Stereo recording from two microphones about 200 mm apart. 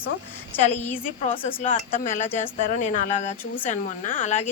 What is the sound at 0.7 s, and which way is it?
A woman's voice, 35° left (ahead or behind).